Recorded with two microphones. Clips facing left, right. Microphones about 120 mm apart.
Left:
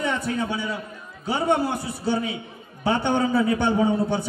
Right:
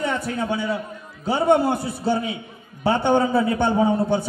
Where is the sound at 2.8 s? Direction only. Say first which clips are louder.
Right 3 dB; 45° right (ahead or behind).